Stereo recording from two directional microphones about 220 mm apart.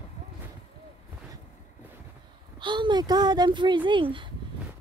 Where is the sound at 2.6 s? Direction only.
20° right (ahead or behind).